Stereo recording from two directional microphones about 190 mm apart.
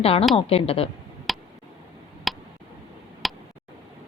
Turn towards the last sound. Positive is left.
turn(degrees=0)  # may be behind; listen again after turning